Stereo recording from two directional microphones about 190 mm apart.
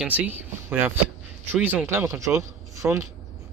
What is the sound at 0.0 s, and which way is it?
Speech, 10° right (ahead or behind).